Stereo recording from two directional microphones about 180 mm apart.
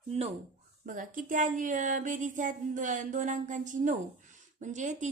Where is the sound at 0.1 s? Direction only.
35° right (ahead or behind).